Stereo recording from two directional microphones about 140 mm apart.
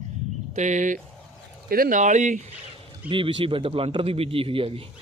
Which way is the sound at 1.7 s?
80° right.